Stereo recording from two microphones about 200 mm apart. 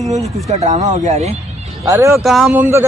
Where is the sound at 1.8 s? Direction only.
15° right (ahead or behind).